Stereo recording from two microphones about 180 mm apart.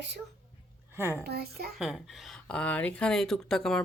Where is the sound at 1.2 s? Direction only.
60° right (ahead or behind).